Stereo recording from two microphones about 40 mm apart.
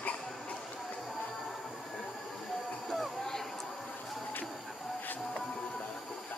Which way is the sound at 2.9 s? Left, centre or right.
Centre.